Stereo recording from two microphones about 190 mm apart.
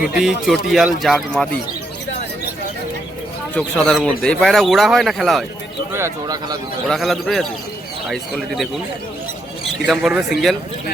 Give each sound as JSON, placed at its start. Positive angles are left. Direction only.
{"t": 0.1, "sound": "speech", "side_deg": -5}
{"t": 3.8, "sound": "speech", "side_deg": 5}
{"t": 5.9, "sound": "a man's voice", "side_deg": -15}
{"t": 6.8, "sound": "speech", "side_deg": 0}
{"t": 9.8, "sound": "speech", "side_deg": 0}